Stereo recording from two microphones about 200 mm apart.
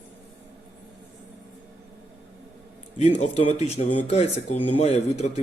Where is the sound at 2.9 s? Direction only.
35° left (ahead or behind).